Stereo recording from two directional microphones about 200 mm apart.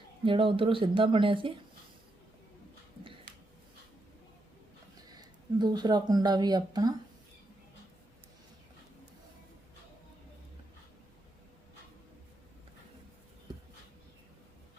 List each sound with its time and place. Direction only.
0.3 s speech: 25° right (ahead or behind)
5.1 s speech: 20° right (ahead or behind)